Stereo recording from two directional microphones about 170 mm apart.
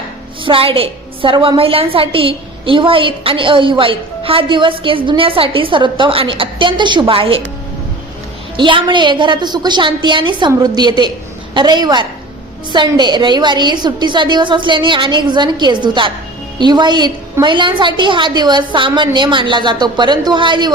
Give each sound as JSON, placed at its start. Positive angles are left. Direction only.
{"t": 0.4, "sound": "a woman's voice", "side_deg": -30}
{"t": 8.5, "sound": "a woman's voice", "side_deg": -30}